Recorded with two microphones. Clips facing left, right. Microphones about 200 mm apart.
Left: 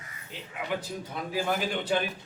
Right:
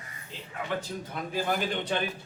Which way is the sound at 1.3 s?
5° left (ahead or behind).